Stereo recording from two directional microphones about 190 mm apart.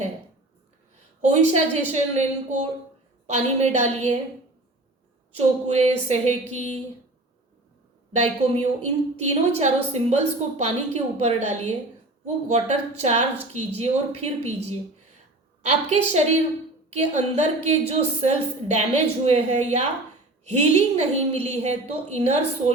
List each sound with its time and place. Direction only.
1.3 s a woman's voice: 35° right (ahead or behind)
5.6 s a woman's voice: 35° right (ahead or behind)
8.1 s a woman's voice: 35° right (ahead or behind)